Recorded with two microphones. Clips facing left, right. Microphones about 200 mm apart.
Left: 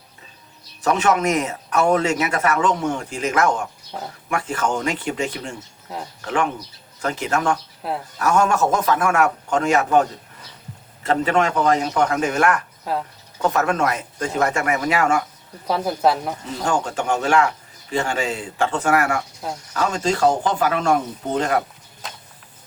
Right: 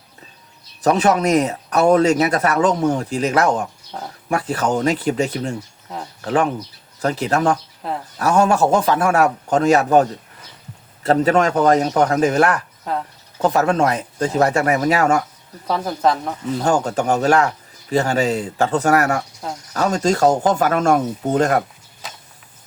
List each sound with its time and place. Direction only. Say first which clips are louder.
0.8 s speech: right 3 dB; 35° right (ahead or behind)
7.8 s speech: even; 5° left (ahead or behind)
8.2 s speech: right 3 dB; 30° right (ahead or behind)
12.8 s speech: right 1 dB; 5° left (ahead or behind)
13.4 s speech: right 3 dB; 30° right (ahead or behind)
15.6 s speech: even; 10° left (ahead or behind)
16.6 s speech: right 3 dB; 40° right (ahead or behind)